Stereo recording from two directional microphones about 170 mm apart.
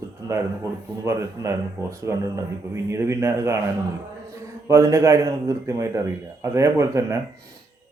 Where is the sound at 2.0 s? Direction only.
20° right (ahead or behind).